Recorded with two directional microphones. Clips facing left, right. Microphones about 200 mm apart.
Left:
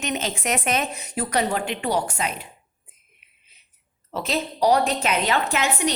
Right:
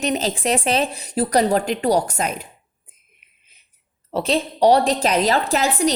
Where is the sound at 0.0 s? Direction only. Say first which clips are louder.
Right 5 dB; 35° right (ahead or behind).